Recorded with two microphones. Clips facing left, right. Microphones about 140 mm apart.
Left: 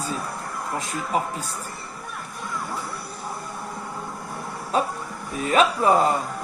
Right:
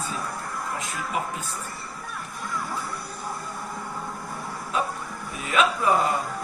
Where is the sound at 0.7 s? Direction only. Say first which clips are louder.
Left 4 dB; 35° left (ahead or behind).